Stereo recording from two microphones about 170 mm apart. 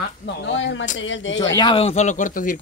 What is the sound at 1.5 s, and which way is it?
Speech, 30° left (ahead or behind).